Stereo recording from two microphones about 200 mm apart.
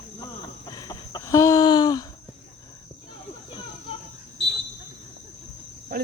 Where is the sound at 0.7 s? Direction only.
20° left (ahead or behind).